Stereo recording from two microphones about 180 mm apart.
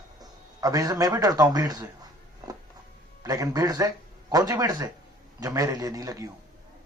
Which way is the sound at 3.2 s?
20° right (ahead or behind).